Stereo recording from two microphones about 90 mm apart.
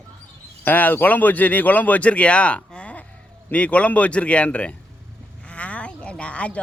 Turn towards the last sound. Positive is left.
turn(degrees=15)  # may be behind; listen again after turning